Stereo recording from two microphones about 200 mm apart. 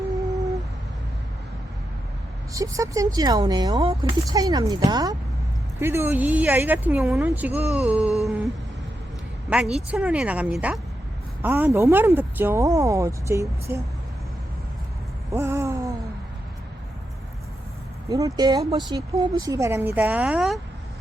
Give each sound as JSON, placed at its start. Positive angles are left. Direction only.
{"t": 2.5, "sound": "speech", "side_deg": -15}
{"t": 9.5, "sound": "a woman's voice", "side_deg": 0}
{"t": 15.3, "sound": "a sound", "side_deg": -15}
{"t": 18.1, "sound": "speech", "side_deg": -20}